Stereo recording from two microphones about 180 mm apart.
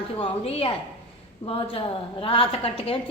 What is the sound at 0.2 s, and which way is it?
A woman's voice, 30° left (ahead or behind).